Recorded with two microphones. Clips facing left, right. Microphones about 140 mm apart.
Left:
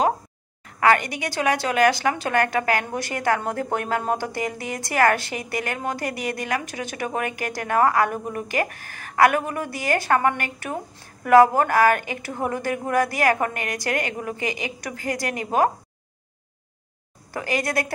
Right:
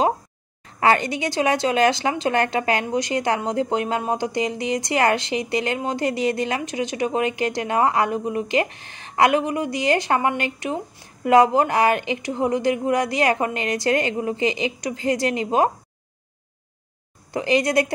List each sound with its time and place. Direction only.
0.7 s a woman's voice: 25° right (ahead or behind)
17.3 s a woman's voice: 20° right (ahead or behind)